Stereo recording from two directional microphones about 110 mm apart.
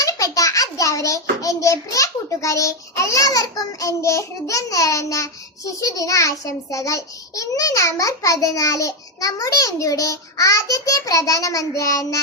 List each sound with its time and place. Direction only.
0.0 s a child's voice: 30° left (ahead or behind)